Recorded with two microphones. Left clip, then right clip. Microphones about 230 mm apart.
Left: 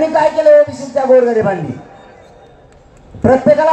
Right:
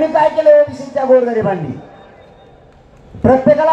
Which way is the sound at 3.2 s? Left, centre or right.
Left.